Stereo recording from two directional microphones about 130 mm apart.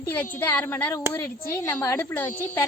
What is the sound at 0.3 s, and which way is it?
A woman's voice, 15° left (ahead or behind).